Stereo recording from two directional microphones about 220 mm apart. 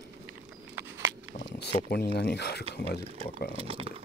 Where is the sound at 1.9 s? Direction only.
45° left (ahead or behind).